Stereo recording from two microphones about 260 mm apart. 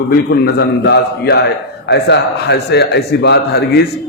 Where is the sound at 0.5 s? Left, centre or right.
Left.